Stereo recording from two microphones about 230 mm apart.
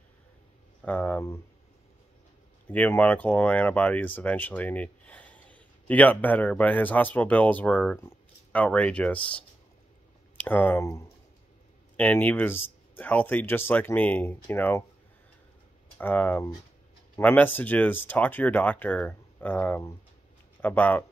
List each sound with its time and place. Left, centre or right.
0.8 s speech: centre
2.7 s speech: centre
16.0 s speech: centre